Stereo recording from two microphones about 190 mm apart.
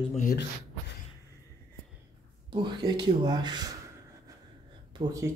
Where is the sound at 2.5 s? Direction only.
25° right (ahead or behind).